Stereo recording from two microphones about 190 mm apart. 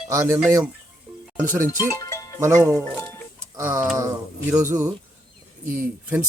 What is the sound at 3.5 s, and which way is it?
Speech, 15° right (ahead or behind).